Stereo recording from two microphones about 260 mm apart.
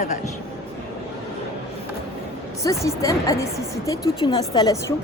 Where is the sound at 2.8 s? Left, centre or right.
Centre.